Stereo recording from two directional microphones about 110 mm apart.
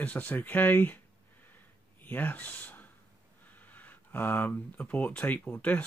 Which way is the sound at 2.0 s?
15° left (ahead or behind).